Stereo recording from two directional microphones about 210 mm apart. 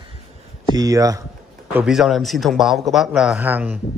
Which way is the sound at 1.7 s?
Centre (ahead or behind).